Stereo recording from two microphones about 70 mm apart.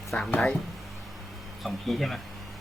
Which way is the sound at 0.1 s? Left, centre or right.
Centre.